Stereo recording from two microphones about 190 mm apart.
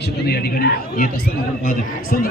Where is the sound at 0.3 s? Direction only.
55° left (ahead or behind).